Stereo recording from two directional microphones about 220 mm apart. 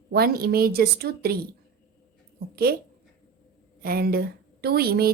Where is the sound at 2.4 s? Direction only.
45° right (ahead or behind).